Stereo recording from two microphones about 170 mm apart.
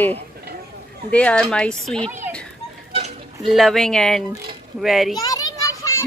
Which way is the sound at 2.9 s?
35° right (ahead or behind).